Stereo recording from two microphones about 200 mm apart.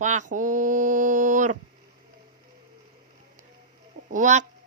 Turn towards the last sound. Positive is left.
turn(degrees=-40)  # may be behind; listen again after turning